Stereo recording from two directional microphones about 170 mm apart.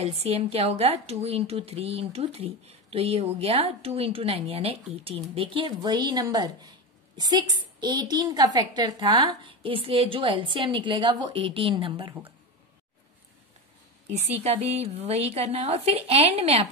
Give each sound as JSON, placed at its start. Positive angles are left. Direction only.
{"t": 0.0, "sound": "a woman's voice", "side_deg": -35}
{"t": 14.1, "sound": "a woman's voice", "side_deg": -40}